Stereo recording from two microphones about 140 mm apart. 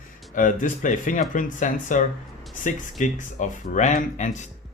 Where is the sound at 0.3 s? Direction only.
65° left (ahead or behind).